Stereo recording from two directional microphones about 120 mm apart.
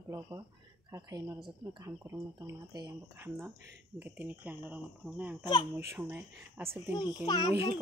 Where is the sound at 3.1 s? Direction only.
20° right (ahead or behind).